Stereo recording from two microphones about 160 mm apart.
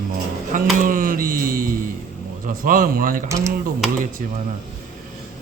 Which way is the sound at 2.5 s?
60° right (ahead or behind).